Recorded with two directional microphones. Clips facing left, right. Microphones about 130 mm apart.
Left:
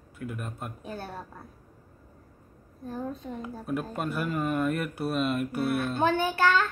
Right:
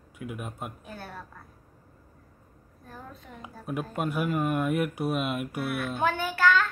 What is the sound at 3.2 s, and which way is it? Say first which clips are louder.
Speech: left 9 dB; 30° left (ahead or behind).